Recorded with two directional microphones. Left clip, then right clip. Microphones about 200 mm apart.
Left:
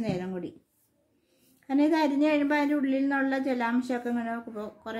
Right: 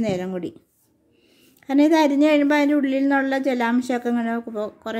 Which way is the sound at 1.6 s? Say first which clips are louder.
Right 8 dB; 45° right (ahead or behind).